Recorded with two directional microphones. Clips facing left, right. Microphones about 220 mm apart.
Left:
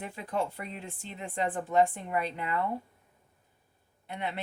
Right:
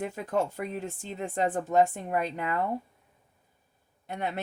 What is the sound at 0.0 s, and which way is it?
Speech, 45° right (ahead or behind).